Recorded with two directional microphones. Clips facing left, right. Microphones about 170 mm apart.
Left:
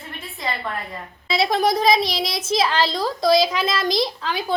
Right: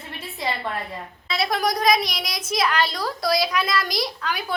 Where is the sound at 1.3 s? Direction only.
25° left (ahead or behind).